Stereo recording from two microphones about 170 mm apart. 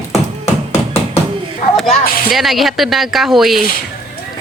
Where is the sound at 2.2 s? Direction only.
Centre (ahead or behind).